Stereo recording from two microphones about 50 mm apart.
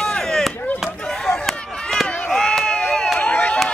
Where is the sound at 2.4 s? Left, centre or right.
Centre.